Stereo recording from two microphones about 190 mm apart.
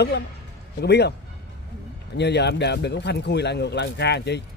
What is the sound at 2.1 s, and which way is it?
A man's voice, 65° left (ahead or behind).